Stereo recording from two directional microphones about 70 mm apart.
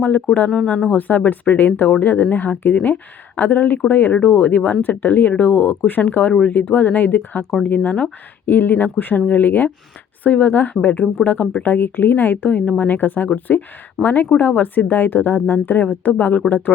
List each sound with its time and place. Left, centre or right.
0.3 s speech: centre
0.9 s speech: left
7.8 s speech: centre
8.4 s speech: left